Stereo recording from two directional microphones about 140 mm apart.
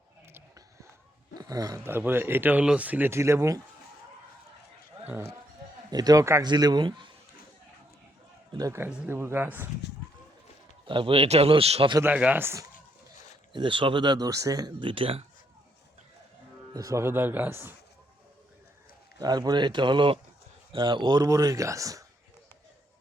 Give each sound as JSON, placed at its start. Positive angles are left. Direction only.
{"t": 1.4, "sound": "speech", "side_deg": -25}
{"t": 5.0, "sound": "speech", "side_deg": -15}
{"t": 5.9, "sound": "speech", "side_deg": -25}
{"t": 8.5, "sound": "speech", "side_deg": -20}
{"t": 10.8, "sound": "speech", "side_deg": -40}
{"t": 12.1, "sound": "speech", "side_deg": -10}
{"t": 13.5, "sound": "speech", "side_deg": -35}
{"t": 16.7, "sound": "speech", "side_deg": -20}
{"t": 19.2, "sound": "speech", "side_deg": -30}